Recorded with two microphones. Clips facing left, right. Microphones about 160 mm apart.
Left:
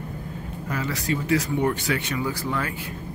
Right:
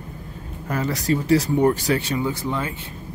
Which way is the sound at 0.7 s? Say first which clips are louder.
Right 5 dB; 40° right (ahead or behind).